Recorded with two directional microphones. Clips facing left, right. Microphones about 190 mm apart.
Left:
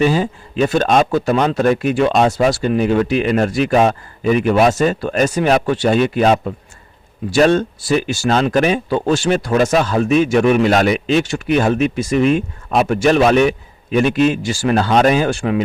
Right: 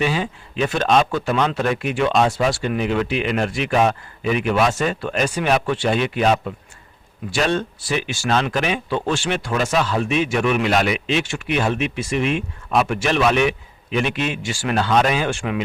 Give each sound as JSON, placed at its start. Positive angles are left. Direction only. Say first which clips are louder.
{"t": 0.0, "sound": "speech", "louder": "left 6 dB", "side_deg": 40}